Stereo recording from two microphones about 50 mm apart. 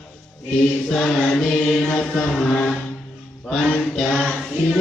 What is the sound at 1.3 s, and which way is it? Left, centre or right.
Chant, centre.